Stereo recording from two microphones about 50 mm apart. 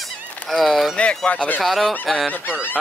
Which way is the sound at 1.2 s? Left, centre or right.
Left.